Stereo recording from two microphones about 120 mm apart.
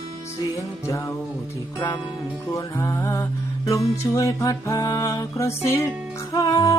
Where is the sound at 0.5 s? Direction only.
25° left (ahead or behind).